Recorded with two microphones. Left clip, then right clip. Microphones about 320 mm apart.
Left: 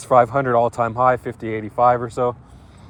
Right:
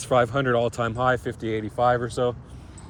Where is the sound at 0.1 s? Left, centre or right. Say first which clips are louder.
Left 6 dB; centre.